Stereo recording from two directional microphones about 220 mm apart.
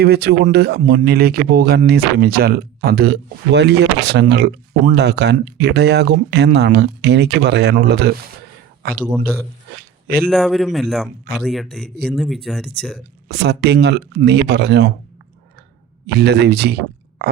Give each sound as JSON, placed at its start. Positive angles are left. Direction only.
{"t": 0.0, "sound": "speech", "side_deg": -45}
{"t": 10.2, "sound": "speech", "side_deg": 0}
{"t": 13.2, "sound": "speech", "side_deg": -50}
{"t": 16.0, "sound": "speech", "side_deg": -50}